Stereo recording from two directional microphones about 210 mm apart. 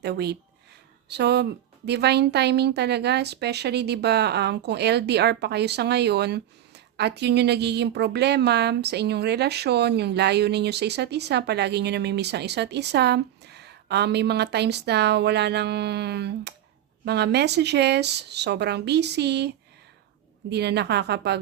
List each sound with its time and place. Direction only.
0.0 s a woman's voice: 50° right (ahead or behind)